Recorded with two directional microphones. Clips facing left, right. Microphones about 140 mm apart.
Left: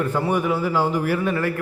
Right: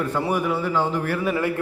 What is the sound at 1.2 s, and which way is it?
Speech, 15° right (ahead or behind).